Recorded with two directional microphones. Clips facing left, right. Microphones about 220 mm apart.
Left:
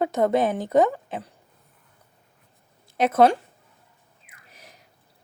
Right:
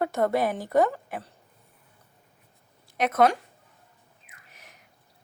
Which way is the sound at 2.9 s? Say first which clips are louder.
Left 4 dB; 30° left (ahead or behind).